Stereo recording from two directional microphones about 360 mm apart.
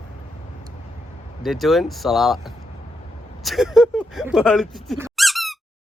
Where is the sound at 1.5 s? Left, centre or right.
Centre.